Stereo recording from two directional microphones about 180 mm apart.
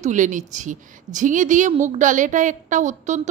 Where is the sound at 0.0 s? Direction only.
45° right (ahead or behind).